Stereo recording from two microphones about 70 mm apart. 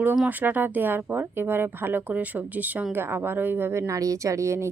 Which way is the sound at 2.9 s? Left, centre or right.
Right.